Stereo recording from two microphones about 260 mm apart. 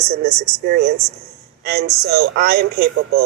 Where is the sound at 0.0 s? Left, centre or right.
Right.